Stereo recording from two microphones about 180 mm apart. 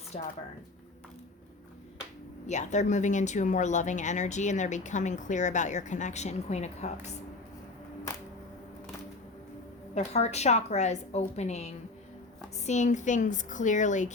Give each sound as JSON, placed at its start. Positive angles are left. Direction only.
{"t": 0.1, "sound": "speech", "side_deg": 35}
{"t": 2.5, "sound": "speech", "side_deg": 40}
{"t": 9.9, "sound": "a woman's voice", "side_deg": 40}